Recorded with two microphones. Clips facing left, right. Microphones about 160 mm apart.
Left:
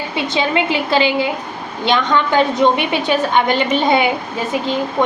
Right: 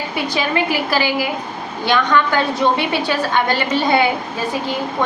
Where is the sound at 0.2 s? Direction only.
25° left (ahead or behind).